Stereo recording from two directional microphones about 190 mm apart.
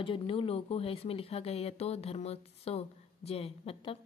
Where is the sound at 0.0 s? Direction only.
30° left (ahead or behind).